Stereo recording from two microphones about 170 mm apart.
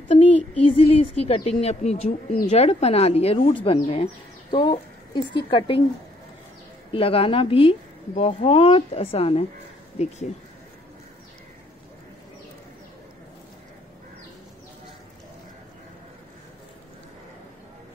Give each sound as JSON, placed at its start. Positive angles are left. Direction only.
{"t": 0.1, "sound": "speech", "side_deg": 40}
{"t": 6.9, "sound": "speech", "side_deg": 35}